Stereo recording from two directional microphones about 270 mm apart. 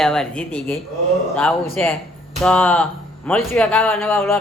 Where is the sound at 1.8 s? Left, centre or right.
Centre.